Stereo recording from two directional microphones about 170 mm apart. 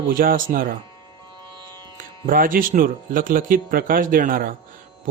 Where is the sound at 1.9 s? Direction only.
55° right (ahead or behind).